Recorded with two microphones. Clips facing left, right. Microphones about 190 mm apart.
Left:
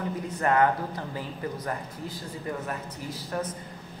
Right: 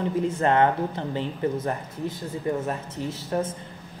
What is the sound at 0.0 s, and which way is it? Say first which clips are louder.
A woman's voice: right 5 dB; 25° right (ahead or behind).